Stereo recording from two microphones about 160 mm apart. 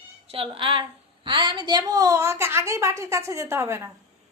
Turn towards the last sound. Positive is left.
turn(degrees=-15)  # may be behind; listen again after turning